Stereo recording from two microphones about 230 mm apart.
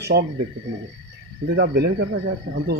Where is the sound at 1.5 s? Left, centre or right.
Right.